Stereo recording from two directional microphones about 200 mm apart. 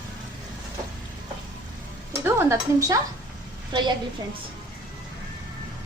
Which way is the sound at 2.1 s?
10° right (ahead or behind).